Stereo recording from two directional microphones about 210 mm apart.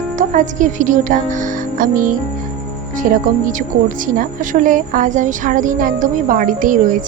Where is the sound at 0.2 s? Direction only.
35° right (ahead or behind).